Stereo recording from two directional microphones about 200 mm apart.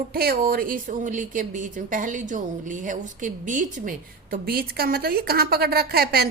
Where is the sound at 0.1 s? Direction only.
50° right (ahead or behind).